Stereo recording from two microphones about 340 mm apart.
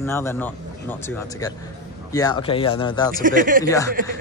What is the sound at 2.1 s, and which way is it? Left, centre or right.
Speech, centre.